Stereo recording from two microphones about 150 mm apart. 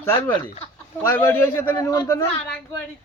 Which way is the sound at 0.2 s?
15° left (ahead or behind).